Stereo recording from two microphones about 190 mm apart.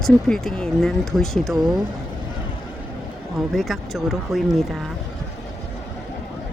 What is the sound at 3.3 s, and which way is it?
Speech, centre (ahead or behind).